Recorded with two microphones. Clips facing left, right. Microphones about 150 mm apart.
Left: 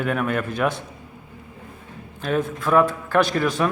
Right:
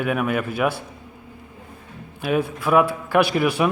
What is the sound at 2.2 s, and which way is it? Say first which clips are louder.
A man's voice: right 1 dB; 10° right (ahead or behind).